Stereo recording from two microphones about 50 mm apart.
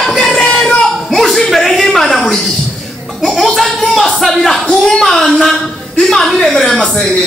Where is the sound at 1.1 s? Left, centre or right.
Centre.